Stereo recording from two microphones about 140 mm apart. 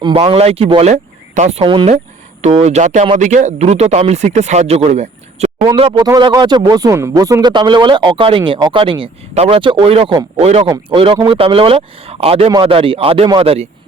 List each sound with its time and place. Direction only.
0.0 s speech: 35° right (ahead or behind)
1.6 s speech: 35° right (ahead or behind)
2.5 s speech: 50° right (ahead or behind)
5.7 s speech: 40° right (ahead or behind)
6.0 s speech: 30° right (ahead or behind); by 10.7 s 50° right (ahead or behind)
10.9 s speech: 40° right (ahead or behind)